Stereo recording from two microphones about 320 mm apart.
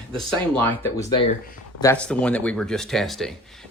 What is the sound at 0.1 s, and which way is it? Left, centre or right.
Speech, centre.